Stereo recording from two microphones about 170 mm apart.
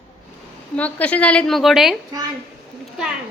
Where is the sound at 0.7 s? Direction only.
10° left (ahead or behind).